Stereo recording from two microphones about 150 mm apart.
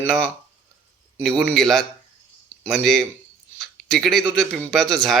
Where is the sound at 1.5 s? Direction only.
Centre (ahead or behind).